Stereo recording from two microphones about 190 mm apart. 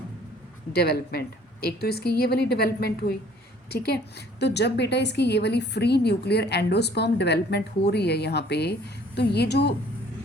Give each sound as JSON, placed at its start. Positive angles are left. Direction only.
{"t": 0.7, "sound": "a woman's voice", "side_deg": 55}